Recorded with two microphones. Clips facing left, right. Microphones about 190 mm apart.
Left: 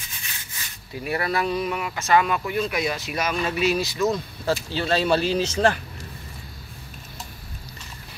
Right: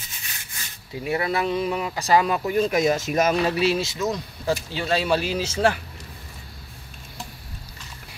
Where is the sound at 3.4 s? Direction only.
35° right (ahead or behind); by 5.7 s 10° right (ahead or behind).